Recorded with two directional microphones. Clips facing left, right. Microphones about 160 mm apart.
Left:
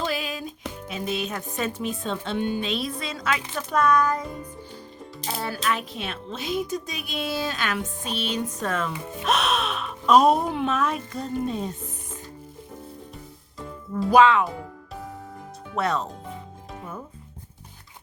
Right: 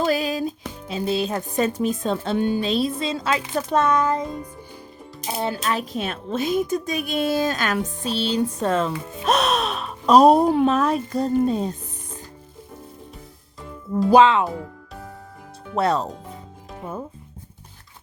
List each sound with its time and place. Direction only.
0.0 s music: 40° right (ahead or behind)
0.9 s a woman's voice: 30° right (ahead or behind)
5.7 s a woman's voice: 45° right (ahead or behind)
13.9 s speech: 30° right (ahead or behind)
15.7 s a woman's voice: 35° right (ahead or behind)